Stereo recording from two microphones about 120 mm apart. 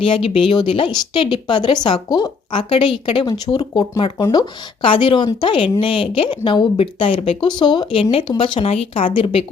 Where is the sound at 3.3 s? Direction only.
35° left (ahead or behind).